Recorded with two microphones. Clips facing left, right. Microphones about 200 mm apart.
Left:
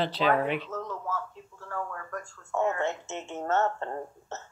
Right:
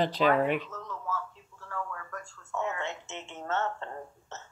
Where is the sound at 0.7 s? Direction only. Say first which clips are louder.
Left 3 dB; 50° left (ahead or behind).